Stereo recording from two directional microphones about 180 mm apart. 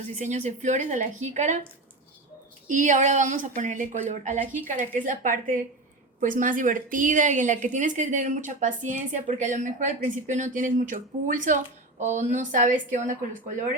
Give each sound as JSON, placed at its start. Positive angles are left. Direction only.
{"t": 0.1, "sound": "a woman's voice", "side_deg": -40}
{"t": 2.6, "sound": "a woman's voice", "side_deg": -45}